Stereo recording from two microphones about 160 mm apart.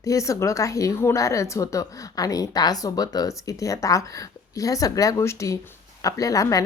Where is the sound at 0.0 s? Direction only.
20° left (ahead or behind).